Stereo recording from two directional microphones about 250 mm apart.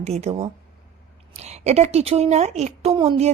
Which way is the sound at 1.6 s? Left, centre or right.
Right.